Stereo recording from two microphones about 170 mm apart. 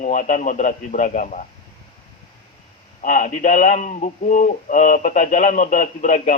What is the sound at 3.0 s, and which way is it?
Speech, 50° left (ahead or behind).